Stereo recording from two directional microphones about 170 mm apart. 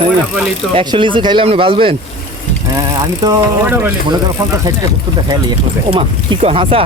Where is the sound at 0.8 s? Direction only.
30° right (ahead or behind).